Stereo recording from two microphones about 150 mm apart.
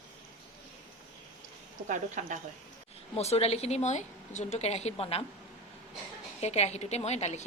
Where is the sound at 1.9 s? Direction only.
55° right (ahead or behind).